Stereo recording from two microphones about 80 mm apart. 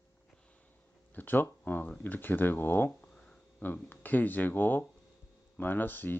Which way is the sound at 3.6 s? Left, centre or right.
Left.